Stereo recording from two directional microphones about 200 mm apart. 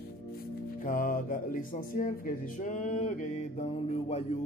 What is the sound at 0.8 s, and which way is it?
Mantra, 45° left (ahead or behind).